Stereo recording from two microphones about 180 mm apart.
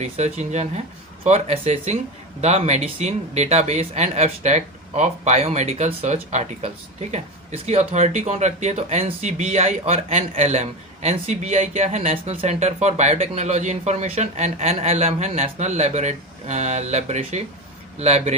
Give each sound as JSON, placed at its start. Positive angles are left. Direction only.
{"t": 0.0, "sound": "speech", "side_deg": -40}